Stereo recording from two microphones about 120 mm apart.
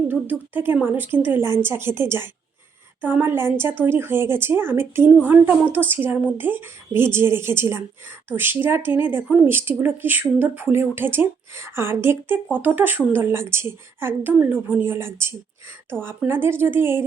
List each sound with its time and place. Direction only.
0.1 s a woman's voice: 15° right (ahead or behind)